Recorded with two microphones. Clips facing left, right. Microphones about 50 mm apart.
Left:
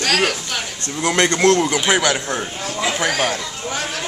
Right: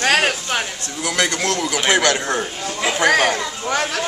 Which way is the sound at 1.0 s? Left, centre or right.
Left.